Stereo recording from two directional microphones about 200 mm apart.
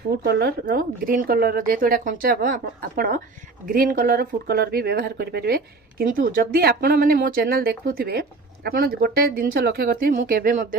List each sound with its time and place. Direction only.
0.2 s speech: 55° right (ahead or behind)